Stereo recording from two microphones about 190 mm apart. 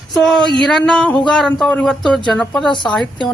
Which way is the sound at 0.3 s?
25° right (ahead or behind).